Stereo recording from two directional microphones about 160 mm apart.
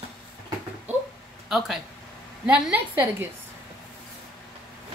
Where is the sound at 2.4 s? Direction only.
10° right (ahead or behind).